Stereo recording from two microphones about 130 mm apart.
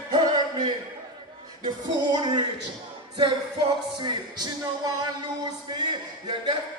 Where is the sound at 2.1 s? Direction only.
35° right (ahead or behind).